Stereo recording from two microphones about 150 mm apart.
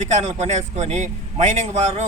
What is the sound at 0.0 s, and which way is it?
A man's voice, 50° right (ahead or behind).